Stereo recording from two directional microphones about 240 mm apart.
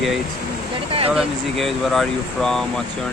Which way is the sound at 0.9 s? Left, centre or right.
Right.